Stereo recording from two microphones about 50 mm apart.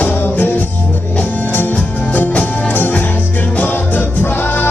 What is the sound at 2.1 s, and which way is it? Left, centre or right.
Music, left.